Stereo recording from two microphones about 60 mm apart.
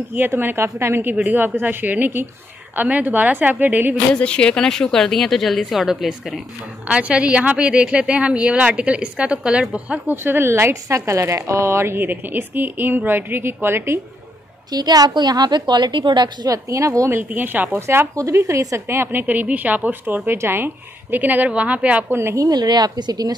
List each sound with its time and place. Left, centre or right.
0.1 s speech: right
1.1 s speech: right
4.1 s speech: centre
6.9 s speech: right
10.0 s speech: right
14.7 s a woman's voice: right
16.4 s speech: right
17.1 s speech: right
17.7 s speech: right
18.9 s speech: right
22.3 s speech: right